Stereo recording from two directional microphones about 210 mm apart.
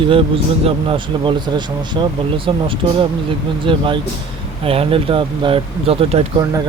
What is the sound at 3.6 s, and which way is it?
Speech, 25° right (ahead or behind).